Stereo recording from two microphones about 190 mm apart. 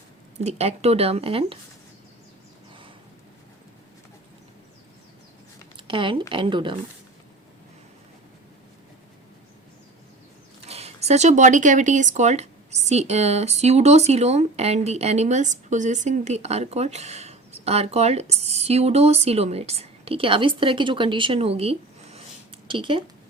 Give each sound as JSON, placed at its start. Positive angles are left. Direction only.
{"t": 0.3, "sound": "speech", "side_deg": -35}
{"t": 5.7, "sound": "speech", "side_deg": -25}
{"t": 10.7, "sound": "speech", "side_deg": -35}